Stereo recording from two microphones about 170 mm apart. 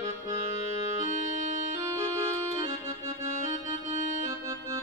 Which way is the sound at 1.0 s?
45° right (ahead or behind).